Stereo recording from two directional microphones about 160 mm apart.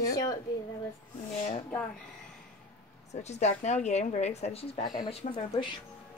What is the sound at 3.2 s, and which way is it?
A woman's voice, 45° left (ahead or behind).